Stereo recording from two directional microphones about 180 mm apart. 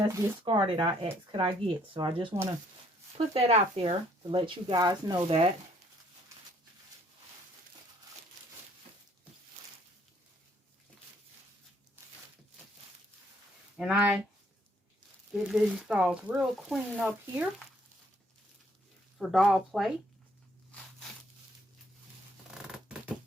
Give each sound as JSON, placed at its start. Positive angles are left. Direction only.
{"t": 0.0, "sound": "speech", "side_deg": -25}
{"t": 5.2, "sound": "stir", "side_deg": -35}
{"t": 13.7, "sound": "speech", "side_deg": -5}
{"t": 15.3, "sound": "speech", "side_deg": -5}
{"t": 19.2, "sound": "speech", "side_deg": 0}
{"t": 22.5, "sound": "scissors", "side_deg": -5}